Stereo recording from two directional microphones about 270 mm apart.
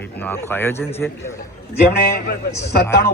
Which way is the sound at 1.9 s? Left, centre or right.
Left.